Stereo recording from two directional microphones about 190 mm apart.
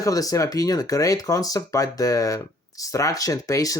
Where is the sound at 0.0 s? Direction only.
20° left (ahead or behind).